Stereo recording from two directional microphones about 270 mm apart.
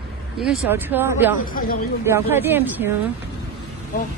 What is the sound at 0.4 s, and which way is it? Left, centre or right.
Speech, centre.